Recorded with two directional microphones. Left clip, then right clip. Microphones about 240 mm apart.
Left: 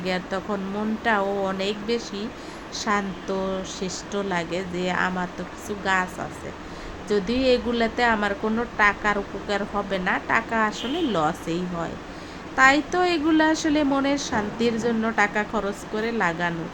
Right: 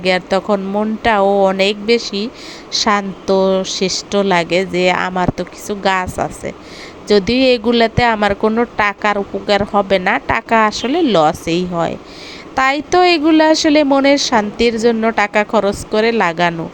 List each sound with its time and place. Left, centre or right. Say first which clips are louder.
0.0 s speech: right 12 dB; right